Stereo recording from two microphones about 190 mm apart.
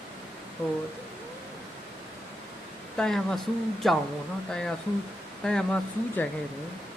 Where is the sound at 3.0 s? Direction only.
Centre (ahead or behind).